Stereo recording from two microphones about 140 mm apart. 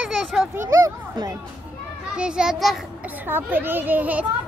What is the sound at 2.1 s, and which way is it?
Speech, 5° right (ahead or behind).